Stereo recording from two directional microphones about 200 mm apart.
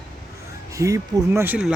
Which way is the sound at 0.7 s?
15° right (ahead or behind).